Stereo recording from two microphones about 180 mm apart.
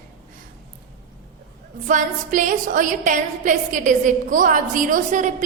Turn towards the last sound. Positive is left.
turn(degrees=-45)  # may be behind; listen again after turning